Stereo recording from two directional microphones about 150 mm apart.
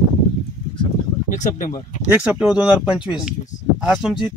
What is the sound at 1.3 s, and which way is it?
Speech, 55° left (ahead or behind).